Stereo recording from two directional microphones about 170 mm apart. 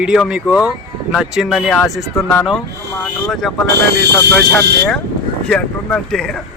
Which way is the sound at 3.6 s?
75° right (ahead or behind).